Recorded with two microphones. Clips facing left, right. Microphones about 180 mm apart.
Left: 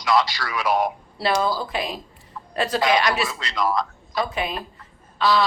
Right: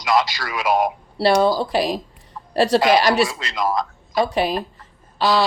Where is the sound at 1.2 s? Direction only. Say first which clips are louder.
Right 6 dB; 35° right (ahead or behind).